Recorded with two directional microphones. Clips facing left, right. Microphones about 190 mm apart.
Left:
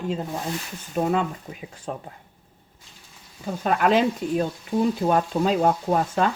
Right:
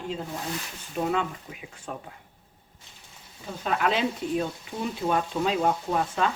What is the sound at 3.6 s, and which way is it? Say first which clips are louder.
Frying: left 6 dB; 45° left (ahead or behind).